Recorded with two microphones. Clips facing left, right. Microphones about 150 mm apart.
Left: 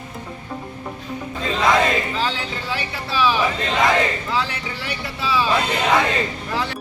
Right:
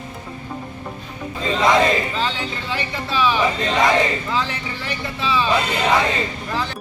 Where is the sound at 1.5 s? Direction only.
Centre (ahead or behind).